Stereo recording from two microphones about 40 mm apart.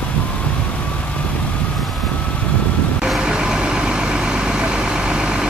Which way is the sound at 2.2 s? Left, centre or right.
Left.